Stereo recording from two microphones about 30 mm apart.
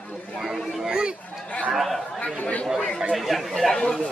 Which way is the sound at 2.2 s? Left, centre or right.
Left.